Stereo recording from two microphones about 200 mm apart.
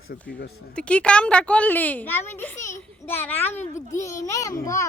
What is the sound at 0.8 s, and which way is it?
Speech, 5° left (ahead or behind).